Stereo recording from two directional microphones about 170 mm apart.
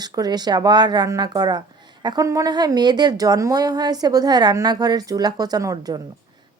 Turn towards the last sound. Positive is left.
turn(degrees=-20)  # may be behind; listen again after turning